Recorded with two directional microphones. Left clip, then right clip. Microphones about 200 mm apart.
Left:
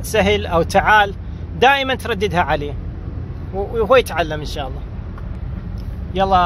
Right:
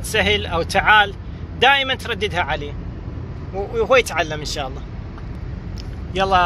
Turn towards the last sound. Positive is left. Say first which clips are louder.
# left 2 dB
turn(degrees=20)  # may be behind; listen again after turning